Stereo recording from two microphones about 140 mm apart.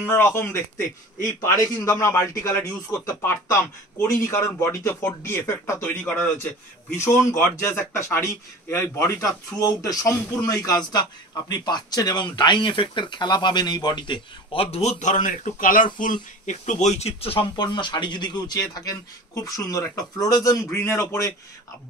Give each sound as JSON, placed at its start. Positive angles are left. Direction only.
{"t": 0.0, "sound": "a man's voice", "side_deg": 15}